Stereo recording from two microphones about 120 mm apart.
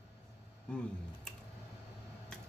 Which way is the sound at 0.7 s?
5° left (ahead or behind).